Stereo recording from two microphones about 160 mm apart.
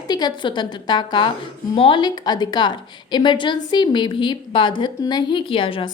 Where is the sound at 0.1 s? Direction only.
25° left (ahead or behind).